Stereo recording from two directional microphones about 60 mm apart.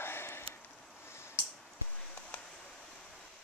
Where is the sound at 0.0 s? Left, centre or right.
Left.